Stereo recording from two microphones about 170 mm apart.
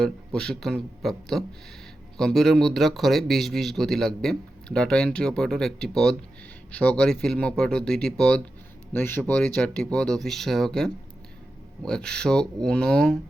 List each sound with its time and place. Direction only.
0.3 s speech: 5° left (ahead or behind)